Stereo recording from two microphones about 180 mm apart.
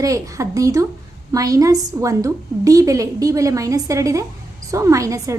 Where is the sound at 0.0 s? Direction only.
20° right (ahead or behind).